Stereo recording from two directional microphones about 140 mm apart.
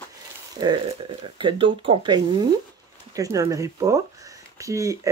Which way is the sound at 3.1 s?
25° right (ahead or behind).